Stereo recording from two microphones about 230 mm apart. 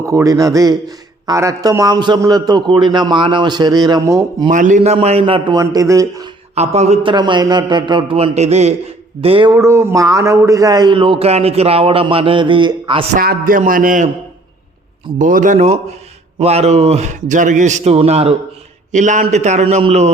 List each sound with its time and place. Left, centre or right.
0.0 s a man's voice: centre
4.4 s a man's voice: right; by 6.3 s centre
6.5 s a man's voice: right
13.1 s a man's voice: right
15.2 s a man's voice: right